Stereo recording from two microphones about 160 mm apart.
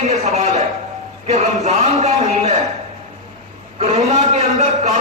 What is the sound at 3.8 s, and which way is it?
A man's voice, 45° right (ahead or behind).